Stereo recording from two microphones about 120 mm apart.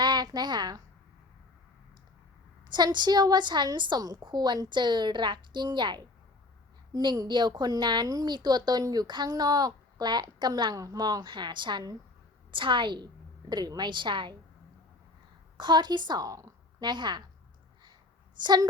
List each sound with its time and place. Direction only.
0.0 s a sound: 35° right (ahead or behind)
2.7 s a woman's voice: 35° right (ahead or behind)
15.5 s a woman's voice: 40° right (ahead or behind)
16.8 s a woman's voice: 40° right (ahead or behind)
18.4 s a woman's voice: 35° right (ahead or behind)